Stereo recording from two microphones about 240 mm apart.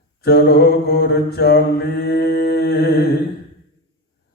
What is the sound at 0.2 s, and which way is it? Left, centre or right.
Mantra, left.